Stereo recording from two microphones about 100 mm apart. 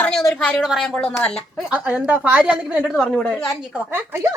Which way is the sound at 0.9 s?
15° left (ahead or behind).